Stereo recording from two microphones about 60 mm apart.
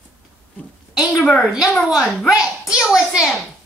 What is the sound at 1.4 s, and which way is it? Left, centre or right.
A woman's voice, centre.